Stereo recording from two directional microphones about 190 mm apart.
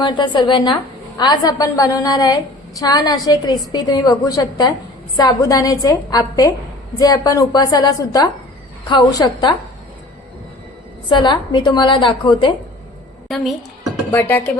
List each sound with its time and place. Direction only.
0.0 s a woman's voice: 25° left (ahead or behind)
11.1 s a woman's voice: 25° left (ahead or behind)
13.2 s a woman's voice: centre (ahead or behind)